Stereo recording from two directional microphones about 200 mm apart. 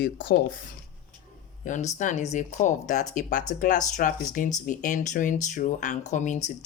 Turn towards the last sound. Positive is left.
turn(degrees=35)  # may be behind; listen again after turning